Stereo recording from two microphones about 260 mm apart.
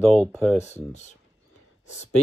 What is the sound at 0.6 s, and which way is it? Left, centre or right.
Speech, left.